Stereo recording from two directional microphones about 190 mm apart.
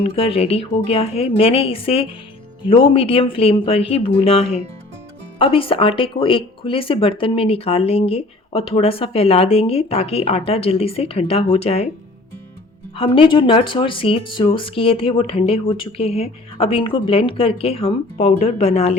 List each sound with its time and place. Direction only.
0.0 s speech: 30° left (ahead or behind)
13.0 s speech: 25° left (ahead or behind)